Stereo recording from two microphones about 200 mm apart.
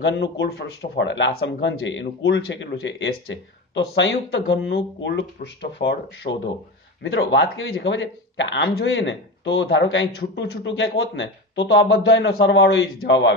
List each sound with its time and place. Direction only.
0.0 s speech: 60° left (ahead or behind)